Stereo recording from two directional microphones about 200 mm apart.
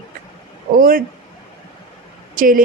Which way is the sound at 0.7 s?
45° right (ahead or behind).